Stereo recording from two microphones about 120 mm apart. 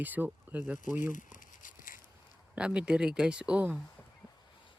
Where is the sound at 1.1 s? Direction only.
90° left.